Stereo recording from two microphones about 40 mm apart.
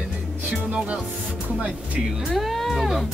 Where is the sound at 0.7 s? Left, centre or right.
Right.